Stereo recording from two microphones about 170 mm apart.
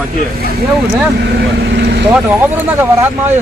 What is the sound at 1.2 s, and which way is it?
Speech, 75° right (ahead or behind).